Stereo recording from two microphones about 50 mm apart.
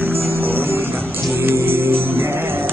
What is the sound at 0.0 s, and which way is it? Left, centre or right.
Music, right.